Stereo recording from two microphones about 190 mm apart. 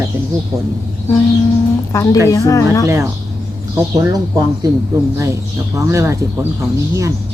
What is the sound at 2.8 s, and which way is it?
Speech, 15° right (ahead or behind).